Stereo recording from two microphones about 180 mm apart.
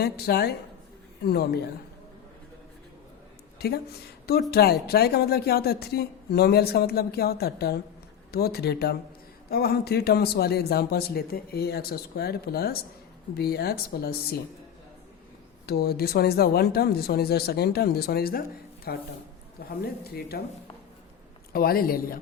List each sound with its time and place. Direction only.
0.0 s speech: 60° left (ahead or behind)
3.6 s speech: 60° left (ahead or behind)
15.6 s speech: 60° left (ahead or behind)
21.5 s speech: 55° left (ahead or behind)